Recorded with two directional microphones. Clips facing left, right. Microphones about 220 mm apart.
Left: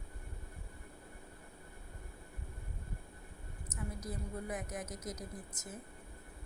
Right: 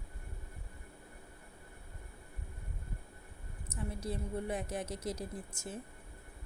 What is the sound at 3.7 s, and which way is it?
A woman's voice, 30° right (ahead or behind).